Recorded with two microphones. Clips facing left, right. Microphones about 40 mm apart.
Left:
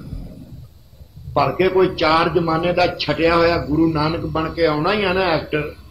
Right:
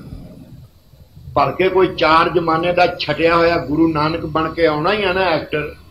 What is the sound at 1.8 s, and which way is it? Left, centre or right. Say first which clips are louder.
A man's voice: right 4 dB; centre.